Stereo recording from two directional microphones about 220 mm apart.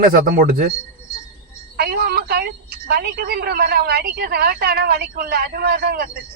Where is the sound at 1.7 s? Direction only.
45° right (ahead or behind).